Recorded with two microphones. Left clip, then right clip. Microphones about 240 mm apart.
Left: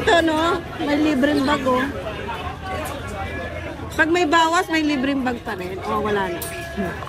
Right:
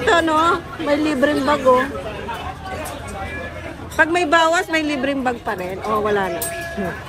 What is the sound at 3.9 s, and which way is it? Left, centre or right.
A woman's voice, centre.